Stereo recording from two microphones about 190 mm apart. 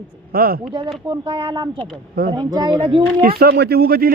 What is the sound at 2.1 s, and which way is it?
Speech, 55° right (ahead or behind).